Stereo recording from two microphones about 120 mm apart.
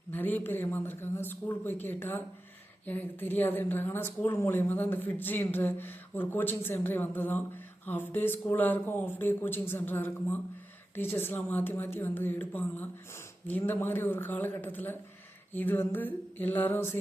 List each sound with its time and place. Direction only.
0.1 s speech: 15° left (ahead or behind)